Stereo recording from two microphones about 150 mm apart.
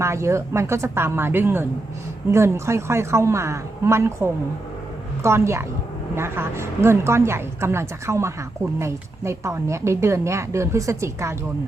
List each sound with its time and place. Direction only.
0.0 s a woman's voice: 20° right (ahead or behind)